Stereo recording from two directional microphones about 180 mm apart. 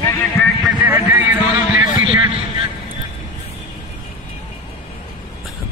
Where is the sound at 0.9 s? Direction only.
10° right (ahead or behind).